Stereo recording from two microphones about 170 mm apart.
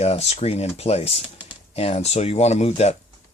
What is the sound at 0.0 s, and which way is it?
Speech, 40° left (ahead or behind).